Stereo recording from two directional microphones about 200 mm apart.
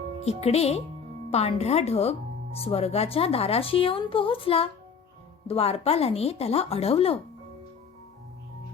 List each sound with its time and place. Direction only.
0.3 s speech: 30° left (ahead or behind)